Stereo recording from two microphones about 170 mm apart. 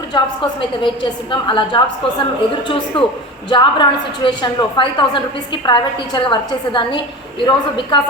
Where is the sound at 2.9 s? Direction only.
30° left (ahead or behind).